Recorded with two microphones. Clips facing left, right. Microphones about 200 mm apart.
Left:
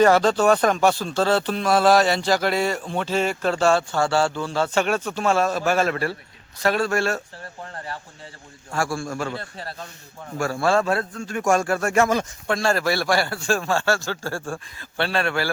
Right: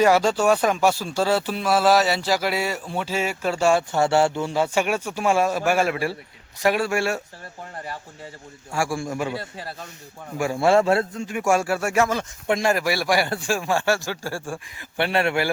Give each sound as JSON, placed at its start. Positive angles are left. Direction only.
{"t": 0.0, "sound": "speech", "side_deg": -10}
{"t": 8.7, "sound": "speech", "side_deg": -15}
{"t": 12.5, "sound": "speech", "side_deg": -20}